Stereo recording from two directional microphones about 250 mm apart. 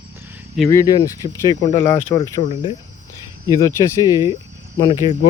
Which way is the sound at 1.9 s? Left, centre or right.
Left.